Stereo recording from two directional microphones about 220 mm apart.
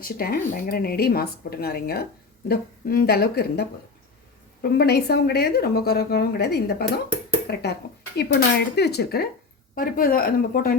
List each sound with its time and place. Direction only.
0.0 s a woman's voice: 45° left (ahead or behind)